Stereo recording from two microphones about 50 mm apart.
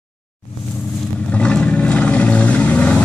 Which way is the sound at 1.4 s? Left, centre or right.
Left.